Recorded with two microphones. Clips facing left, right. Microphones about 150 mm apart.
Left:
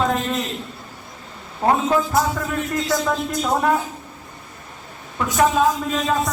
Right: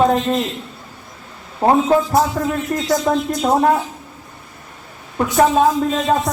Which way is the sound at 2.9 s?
45° right (ahead or behind).